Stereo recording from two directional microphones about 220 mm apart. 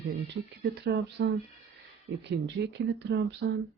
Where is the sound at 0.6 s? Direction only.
50° right (ahead or behind).